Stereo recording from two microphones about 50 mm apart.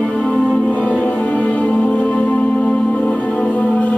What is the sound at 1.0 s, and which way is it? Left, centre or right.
Music, left.